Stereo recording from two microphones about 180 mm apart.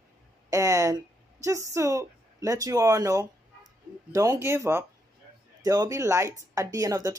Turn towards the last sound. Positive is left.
turn(degrees=-20)  # may be behind; listen again after turning